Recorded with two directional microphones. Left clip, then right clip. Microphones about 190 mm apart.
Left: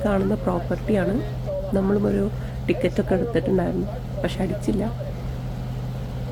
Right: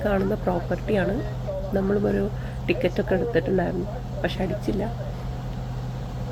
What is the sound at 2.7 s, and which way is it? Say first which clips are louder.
Speech: left 1 dB; 20° left (ahead or behind).